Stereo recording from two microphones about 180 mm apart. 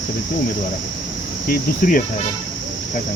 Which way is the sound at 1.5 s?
50° left (ahead or behind).